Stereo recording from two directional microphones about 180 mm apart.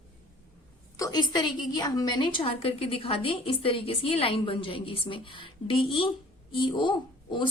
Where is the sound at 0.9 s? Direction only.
20° left (ahead or behind).